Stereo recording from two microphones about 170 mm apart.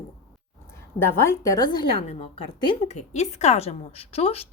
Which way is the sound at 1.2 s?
15° left (ahead or behind).